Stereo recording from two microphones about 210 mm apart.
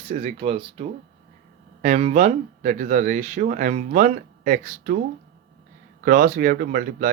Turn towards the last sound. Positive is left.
turn(degrees=-40)  # may be behind; listen again after turning